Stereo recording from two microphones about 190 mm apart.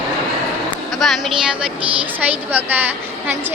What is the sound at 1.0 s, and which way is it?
Speech, centre (ahead or behind).